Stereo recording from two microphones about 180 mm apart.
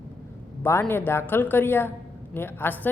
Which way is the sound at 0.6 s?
15° left (ahead or behind).